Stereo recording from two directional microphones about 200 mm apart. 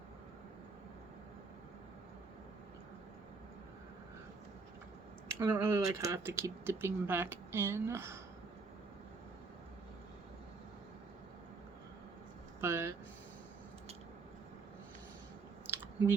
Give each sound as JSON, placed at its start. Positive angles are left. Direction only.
{"t": 5.4, "sound": "speech", "side_deg": -15}
{"t": 12.6, "sound": "speech", "side_deg": -10}
{"t": 15.7, "sound": "chewing", "side_deg": -10}